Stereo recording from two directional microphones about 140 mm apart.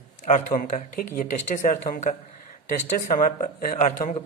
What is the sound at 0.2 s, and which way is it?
A man's voice, 65° left (ahead or behind).